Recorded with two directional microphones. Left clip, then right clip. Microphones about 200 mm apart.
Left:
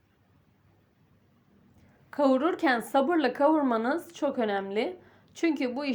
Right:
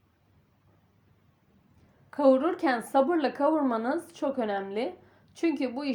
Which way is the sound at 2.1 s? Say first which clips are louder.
Right 2 dB; 30° left (ahead or behind).